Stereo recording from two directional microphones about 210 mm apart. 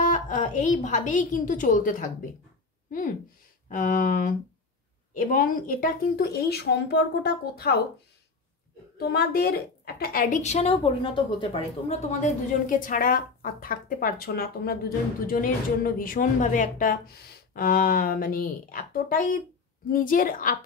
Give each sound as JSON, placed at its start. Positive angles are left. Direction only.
{"t": 0.1, "sound": "a woman's voice", "side_deg": 35}
{"t": 3.6, "sound": "a woman's voice", "side_deg": 40}
{"t": 8.9, "sound": "a woman's voice", "side_deg": 50}